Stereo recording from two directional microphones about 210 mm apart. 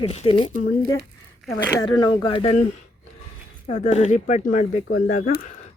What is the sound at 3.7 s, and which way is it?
Speech, 35° left (ahead or behind).